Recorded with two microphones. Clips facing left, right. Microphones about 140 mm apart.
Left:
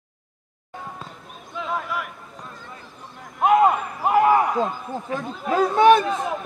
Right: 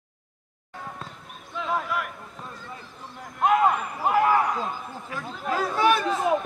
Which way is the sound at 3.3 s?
10° left (ahead or behind).